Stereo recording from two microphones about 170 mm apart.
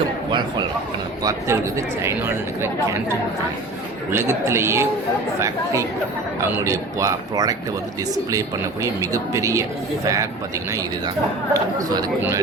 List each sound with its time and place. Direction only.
1.2 s speech: 20° right (ahead or behind)
4.1 s speech: 15° right (ahead or behind)
6.7 s speech: 20° right (ahead or behind)
11.5 s speech: 20° right (ahead or behind)